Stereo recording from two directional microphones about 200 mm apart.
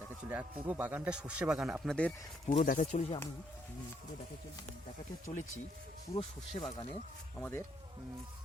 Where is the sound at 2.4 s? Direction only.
40° left (ahead or behind).